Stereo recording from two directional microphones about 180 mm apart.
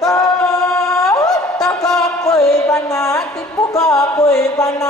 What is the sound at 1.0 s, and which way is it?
Music, 20° left (ahead or behind).